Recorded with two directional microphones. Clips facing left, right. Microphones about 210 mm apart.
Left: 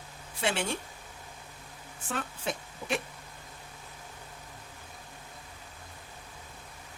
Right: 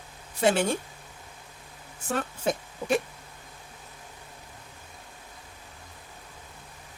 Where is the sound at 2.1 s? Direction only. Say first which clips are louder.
Right 7 dB; 40° right (ahead or behind).